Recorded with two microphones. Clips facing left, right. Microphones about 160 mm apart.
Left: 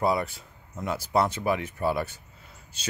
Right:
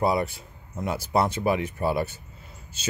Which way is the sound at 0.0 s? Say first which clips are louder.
Right 2 dB; 15° right (ahead or behind).